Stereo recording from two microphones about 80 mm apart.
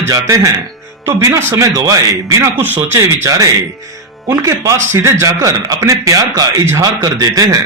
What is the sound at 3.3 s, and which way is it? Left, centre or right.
A man's voice, right.